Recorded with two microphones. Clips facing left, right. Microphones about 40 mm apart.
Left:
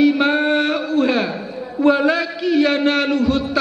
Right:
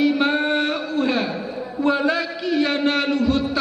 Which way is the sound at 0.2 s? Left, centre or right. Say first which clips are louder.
Left 3 dB; centre.